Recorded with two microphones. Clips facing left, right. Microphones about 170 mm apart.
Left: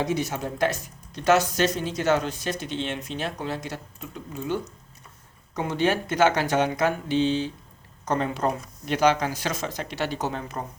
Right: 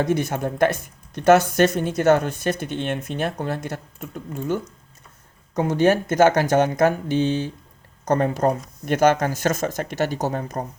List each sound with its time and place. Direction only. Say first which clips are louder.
0.0 s speech: right 5 dB; 55° right (ahead or behind)